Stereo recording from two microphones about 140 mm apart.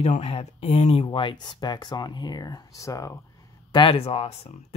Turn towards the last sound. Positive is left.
turn(degrees=50)  # may be behind; listen again after turning